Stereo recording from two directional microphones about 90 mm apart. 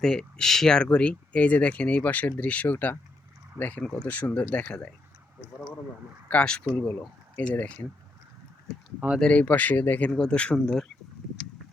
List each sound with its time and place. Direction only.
0.0 s speech: 5° left (ahead or behind)
6.2 s speech: 10° left (ahead or behind)
9.2 s speech: 15° left (ahead or behind)
10.1 s speech: 10° left (ahead or behind)